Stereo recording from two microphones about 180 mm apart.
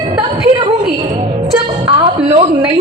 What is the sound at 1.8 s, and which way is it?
Speech, 30° right (ahead or behind).